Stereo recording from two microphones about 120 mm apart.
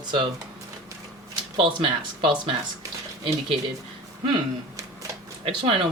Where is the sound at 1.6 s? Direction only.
45° right (ahead or behind).